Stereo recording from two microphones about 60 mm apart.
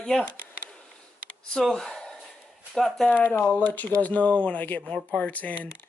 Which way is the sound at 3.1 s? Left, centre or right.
Left.